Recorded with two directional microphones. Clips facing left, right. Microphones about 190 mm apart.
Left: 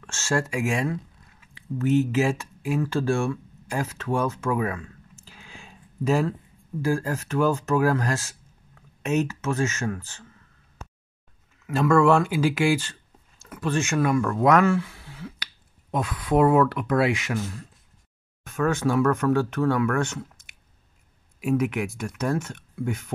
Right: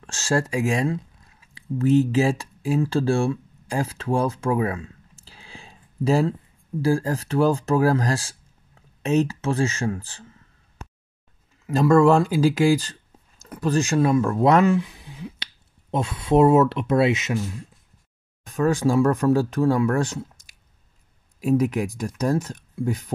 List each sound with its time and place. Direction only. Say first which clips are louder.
0.0 s speech: right 3 dB; 35° right (ahead or behind)
11.6 s speech: right 3 dB; 35° right (ahead or behind)
14.7 s speech: right 3 dB; 20° right (ahead or behind)
18.4 s speech: right 3 dB; 35° right (ahead or behind)